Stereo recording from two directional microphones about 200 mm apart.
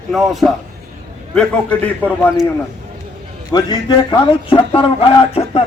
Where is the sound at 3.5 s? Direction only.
20° left (ahead or behind).